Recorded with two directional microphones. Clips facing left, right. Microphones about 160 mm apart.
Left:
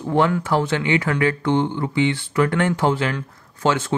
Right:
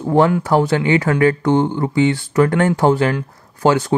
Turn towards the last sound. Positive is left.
turn(degrees=-35)  # may be behind; listen again after turning